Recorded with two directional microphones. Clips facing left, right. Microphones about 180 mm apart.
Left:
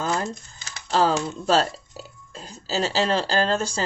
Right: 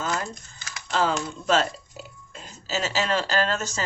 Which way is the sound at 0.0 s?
35° left (ahead or behind).